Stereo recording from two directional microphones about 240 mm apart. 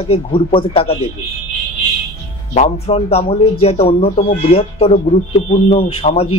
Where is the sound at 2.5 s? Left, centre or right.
Left.